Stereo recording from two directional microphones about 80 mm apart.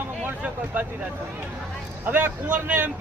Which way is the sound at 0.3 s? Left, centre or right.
Right.